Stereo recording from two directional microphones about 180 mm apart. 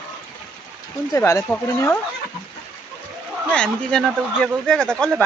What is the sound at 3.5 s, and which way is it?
Speech, 5° left (ahead or behind).